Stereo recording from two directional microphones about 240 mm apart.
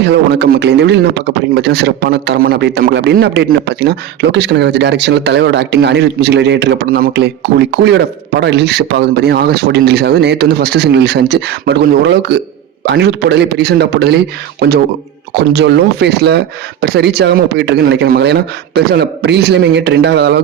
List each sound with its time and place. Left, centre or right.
0.0 s a man's voice: right